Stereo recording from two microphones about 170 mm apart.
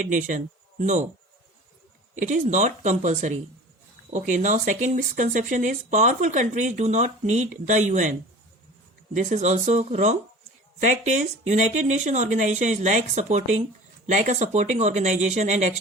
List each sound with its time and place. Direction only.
0.0 s speech: 50° right (ahead or behind)
2.1 s speech: 45° right (ahead or behind)
9.1 s speech: 45° right (ahead or behind)